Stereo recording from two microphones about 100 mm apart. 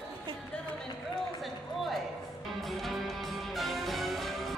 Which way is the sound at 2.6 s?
Centre (ahead or behind).